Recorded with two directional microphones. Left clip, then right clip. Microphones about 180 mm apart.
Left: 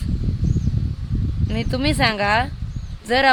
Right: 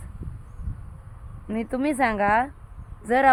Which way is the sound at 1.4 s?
40° left (ahead or behind).